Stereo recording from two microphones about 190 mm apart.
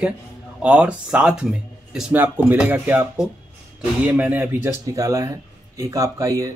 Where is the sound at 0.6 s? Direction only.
5° right (ahead or behind).